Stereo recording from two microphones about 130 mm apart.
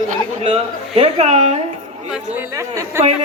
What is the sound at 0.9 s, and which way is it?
Speech, 55° right (ahead or behind).